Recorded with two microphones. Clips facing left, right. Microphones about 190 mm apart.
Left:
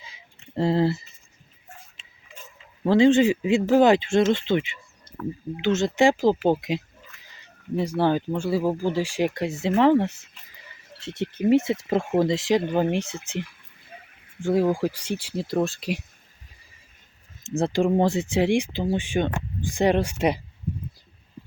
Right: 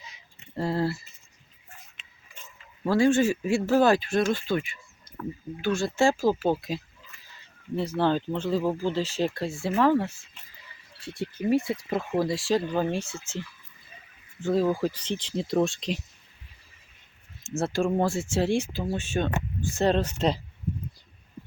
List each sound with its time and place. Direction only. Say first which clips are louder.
0.5 s speech: left 5 dB; 25° left (ahead or behind)
2.0 s tick-tock: even; 30° left (ahead or behind)
2.8 s speech: left 4 dB; 20° left (ahead or behind)
5.6 s speech: left 4 dB; 20° left (ahead or behind)
13.9 s a sound: left 8 dB; 55° left (ahead or behind)
14.4 s speech: left 3 dB; 10° left (ahead or behind)
17.6 s speech: left 4 dB; 15° left (ahead or behind)